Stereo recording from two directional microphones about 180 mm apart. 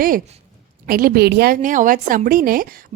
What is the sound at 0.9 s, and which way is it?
A woman's voice, 55° right (ahead or behind).